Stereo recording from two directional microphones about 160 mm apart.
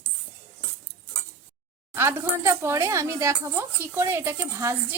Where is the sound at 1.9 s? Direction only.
15° right (ahead or behind).